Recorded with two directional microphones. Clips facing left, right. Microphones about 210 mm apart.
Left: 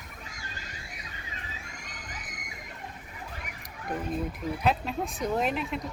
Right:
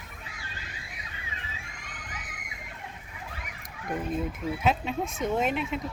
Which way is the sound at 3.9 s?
Centre (ahead or behind).